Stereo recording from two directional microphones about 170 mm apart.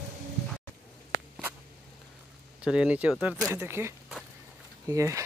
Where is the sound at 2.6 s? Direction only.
5° right (ahead or behind).